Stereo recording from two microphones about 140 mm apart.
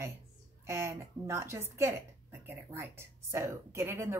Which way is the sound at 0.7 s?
20° right (ahead or behind).